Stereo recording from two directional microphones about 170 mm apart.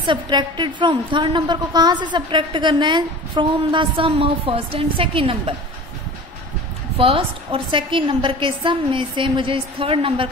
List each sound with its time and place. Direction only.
0.0 s a woman's voice: 25° right (ahead or behind)
7.0 s a woman's voice: 35° right (ahead or behind)